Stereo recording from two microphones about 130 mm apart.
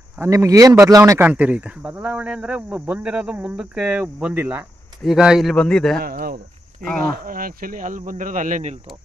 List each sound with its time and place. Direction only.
0.2 s speech: 25° right (ahead or behind)
1.2 s a man's voice: 10° right (ahead or behind); by 5.9 s 5° left (ahead or behind)
6.1 s speech: 90° right; by 8.7 s 70° right (ahead or behind)